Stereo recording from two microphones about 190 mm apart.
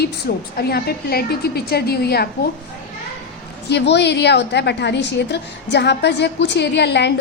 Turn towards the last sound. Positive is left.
turn(degrees=60)  # may be behind; listen again after turning